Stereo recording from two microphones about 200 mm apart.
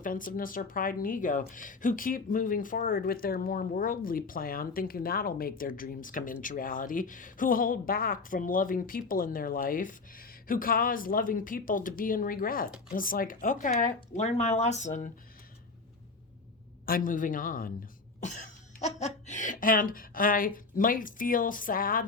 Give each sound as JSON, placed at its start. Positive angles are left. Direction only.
{"t": 0.0, "sound": "speech", "side_deg": 45}
{"t": 16.8, "sound": "speech", "side_deg": 45}
{"t": 18.8, "sound": "speech", "side_deg": 35}